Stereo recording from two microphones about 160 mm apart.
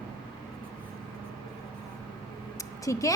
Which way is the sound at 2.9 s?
20° left (ahead or behind).